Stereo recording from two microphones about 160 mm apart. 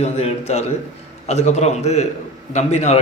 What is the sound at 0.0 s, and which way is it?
A man's voice, 40° left (ahead or behind).